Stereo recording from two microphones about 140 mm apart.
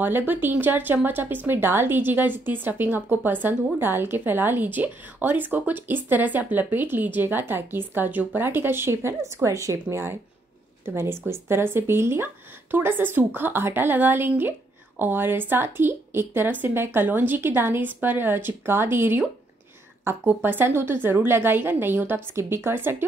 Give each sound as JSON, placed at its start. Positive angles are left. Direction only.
{"t": 0.0, "sound": "speech", "side_deg": -15}